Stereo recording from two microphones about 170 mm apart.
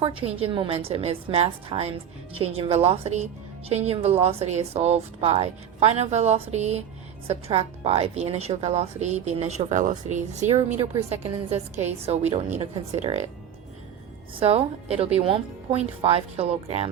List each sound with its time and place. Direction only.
0.0 s a woman's voice: 30° right (ahead or behind)
14.3 s a woman's voice: 35° right (ahead or behind)